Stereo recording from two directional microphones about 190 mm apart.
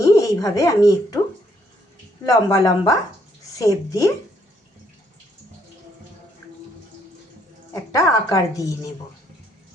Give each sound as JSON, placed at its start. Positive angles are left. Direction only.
{"t": 0.2, "sound": "speech", "side_deg": 20}
{"t": 2.2, "sound": "a woman's voice", "side_deg": 20}
{"t": 7.7, "sound": "a woman's voice", "side_deg": 15}